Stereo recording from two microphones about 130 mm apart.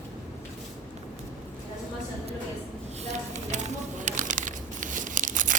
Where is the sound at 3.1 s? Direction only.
60° right (ahead or behind).